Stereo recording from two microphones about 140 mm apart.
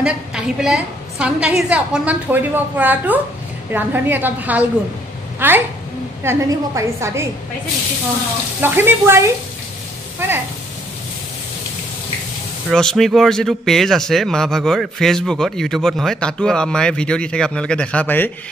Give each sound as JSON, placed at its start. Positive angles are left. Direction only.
{"t": 0.0, "sound": "a woman's voice", "side_deg": -5}
{"t": 8.5, "sound": "a woman's voice", "side_deg": -15}
{"t": 12.6, "sound": "speech", "side_deg": 0}